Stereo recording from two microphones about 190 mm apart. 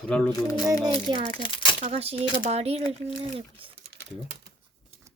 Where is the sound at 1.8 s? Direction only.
35° right (ahead or behind).